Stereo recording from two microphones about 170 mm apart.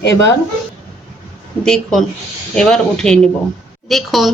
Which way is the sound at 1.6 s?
5° left (ahead or behind).